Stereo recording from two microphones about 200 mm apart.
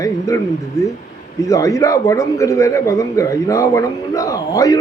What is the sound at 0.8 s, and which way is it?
Speech, 15° left (ahead or behind).